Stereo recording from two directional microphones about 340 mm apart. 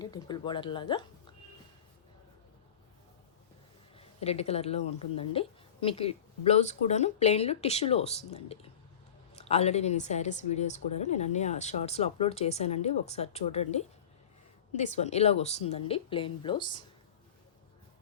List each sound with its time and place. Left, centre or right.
0.0 s speech: centre
3.9 s speech: centre